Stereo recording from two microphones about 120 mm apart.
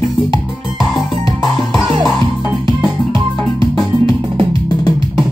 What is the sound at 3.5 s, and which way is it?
Music, 45° right (ahead or behind).